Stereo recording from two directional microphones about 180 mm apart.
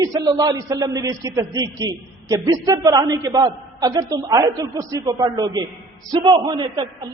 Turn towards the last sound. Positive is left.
turn(degrees=-25)  # may be behind; listen again after turning